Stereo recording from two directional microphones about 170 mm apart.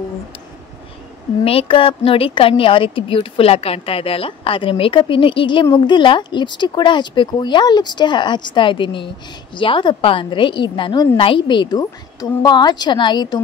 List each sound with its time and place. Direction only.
1.4 s a woman's voice: 35° left (ahead or behind)